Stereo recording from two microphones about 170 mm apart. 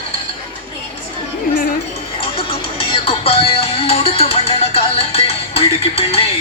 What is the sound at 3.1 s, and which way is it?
Music, 35° left (ahead or behind).